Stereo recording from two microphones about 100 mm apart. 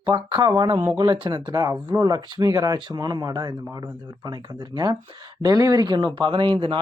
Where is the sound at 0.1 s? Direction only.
45° right (ahead or behind).